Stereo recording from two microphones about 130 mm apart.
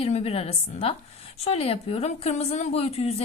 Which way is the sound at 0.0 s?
50° left (ahead or behind).